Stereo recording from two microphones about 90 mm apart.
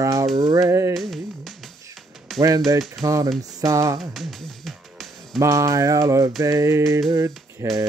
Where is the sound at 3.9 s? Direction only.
Centre (ahead or behind).